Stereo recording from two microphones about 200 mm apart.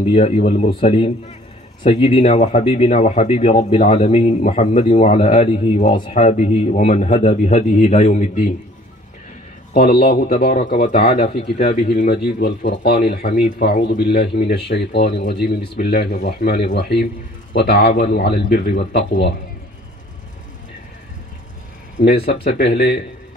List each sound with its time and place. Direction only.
0.0 s a man's voice: 30° left (ahead or behind)
9.8 s speech: 50° left (ahead or behind)
11.5 s speech: 55° left (ahead or behind)
22.2 s speech: 50° left (ahead or behind)